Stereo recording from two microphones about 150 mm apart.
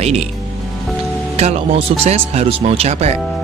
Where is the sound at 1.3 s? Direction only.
45° right (ahead or behind).